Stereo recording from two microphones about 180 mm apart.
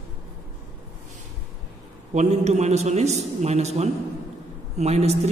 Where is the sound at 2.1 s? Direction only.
40° right (ahead or behind).